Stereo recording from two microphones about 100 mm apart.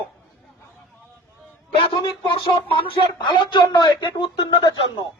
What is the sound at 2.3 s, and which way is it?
Speech, 60° left (ahead or behind).